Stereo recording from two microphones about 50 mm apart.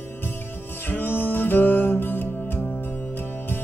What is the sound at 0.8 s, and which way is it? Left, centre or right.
Music, left.